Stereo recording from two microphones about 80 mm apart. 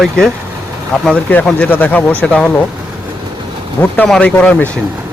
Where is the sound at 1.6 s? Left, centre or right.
Left.